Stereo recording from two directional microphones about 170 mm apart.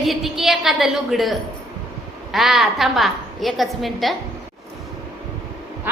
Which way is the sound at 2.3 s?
Centre (ahead or behind).